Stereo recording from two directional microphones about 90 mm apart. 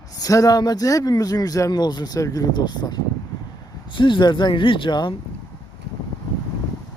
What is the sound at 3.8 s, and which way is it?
Speech, 65° left (ahead or behind).